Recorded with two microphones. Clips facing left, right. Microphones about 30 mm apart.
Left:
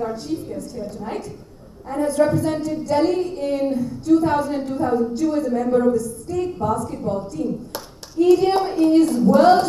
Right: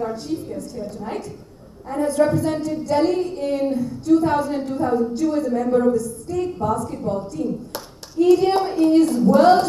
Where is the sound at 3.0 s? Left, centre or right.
Centre.